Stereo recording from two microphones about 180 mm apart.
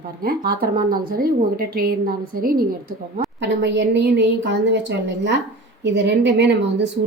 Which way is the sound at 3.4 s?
80° right.